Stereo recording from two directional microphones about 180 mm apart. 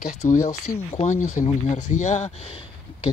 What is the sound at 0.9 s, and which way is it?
Speech, 40° left (ahead or behind).